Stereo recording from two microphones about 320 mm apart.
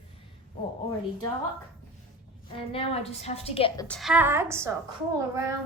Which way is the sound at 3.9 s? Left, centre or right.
Centre.